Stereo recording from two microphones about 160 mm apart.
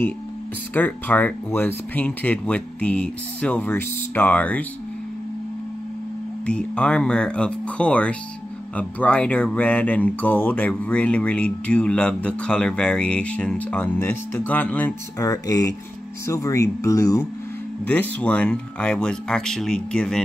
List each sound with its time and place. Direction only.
0.7 s speech: 10° left (ahead or behind)
6.4 s speech: 5° left (ahead or behind)
15.1 s speech: 20° left (ahead or behind)
17.8 s speech: 10° left (ahead or behind)